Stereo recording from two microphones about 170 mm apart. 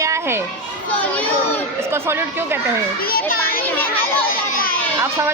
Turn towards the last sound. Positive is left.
turn(degrees=60)  # may be behind; listen again after turning